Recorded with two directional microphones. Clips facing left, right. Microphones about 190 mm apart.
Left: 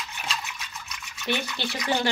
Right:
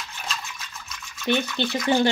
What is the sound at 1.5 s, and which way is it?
Speech, 20° right (ahead or behind).